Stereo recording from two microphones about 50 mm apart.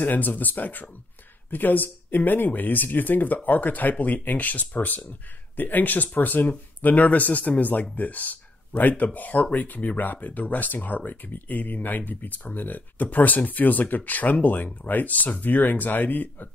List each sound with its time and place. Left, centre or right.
0.0 s speech: left